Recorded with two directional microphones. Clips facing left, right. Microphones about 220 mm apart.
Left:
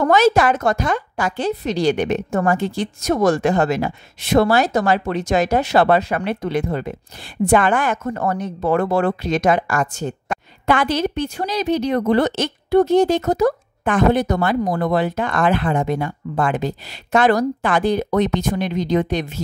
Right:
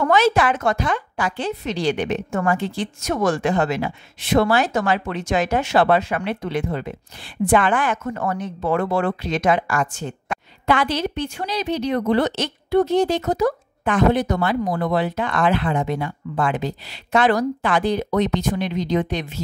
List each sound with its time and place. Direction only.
0.0 s a woman's voice: 40° left (ahead or behind)